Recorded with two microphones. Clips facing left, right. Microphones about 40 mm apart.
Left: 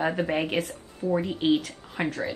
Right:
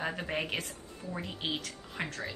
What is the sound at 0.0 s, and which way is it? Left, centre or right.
Speech, centre.